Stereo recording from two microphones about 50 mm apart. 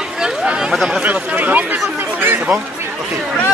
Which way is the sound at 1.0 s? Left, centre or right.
Right.